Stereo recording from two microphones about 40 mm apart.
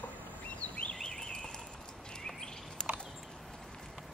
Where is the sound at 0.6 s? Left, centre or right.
Left.